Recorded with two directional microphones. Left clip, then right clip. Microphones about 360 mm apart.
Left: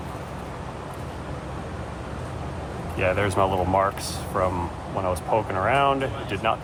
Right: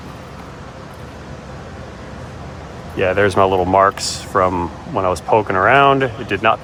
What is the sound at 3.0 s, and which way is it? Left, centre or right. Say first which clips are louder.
Speech: right 8 dB; right.